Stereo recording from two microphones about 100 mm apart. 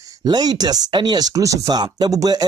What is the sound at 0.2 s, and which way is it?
Speech, 45° right (ahead or behind).